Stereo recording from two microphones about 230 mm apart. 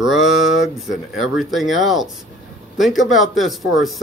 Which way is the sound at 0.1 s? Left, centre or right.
Centre.